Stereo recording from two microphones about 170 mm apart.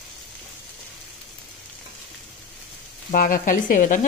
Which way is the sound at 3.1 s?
55° left (ahead or behind).